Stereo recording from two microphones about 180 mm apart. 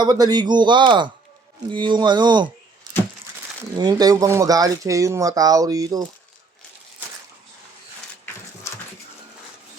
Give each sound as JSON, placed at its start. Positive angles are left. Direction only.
{"t": 0.0, "sound": "speech", "side_deg": -20}
{"t": 3.8, "sound": "speech", "side_deg": -20}
{"t": 8.7, "sound": "dog", "side_deg": 15}